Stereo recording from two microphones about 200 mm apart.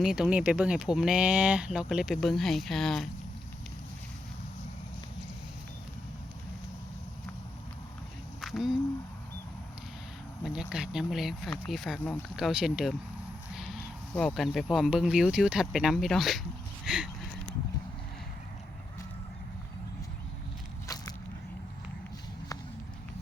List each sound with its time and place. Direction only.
0.0 s speech: 5° right (ahead or behind)
8.4 s a sound: centre (ahead or behind)
10.4 s speech: 5° right (ahead or behind)
14.2 s speech: centre (ahead or behind)
16.8 s a sound: 5° right (ahead or behind)
20.8 s walk: 15° left (ahead or behind)